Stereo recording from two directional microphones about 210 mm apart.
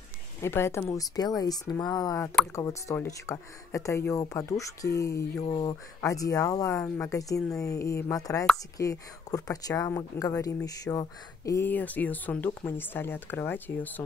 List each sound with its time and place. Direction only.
0.4 s speech: 10° left (ahead or behind)
7.3 s speech: centre (ahead or behind)
7.6 s speech: 15° left (ahead or behind)